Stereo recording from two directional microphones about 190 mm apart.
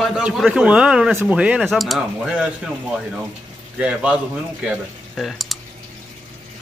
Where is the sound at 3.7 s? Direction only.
5° right (ahead or behind).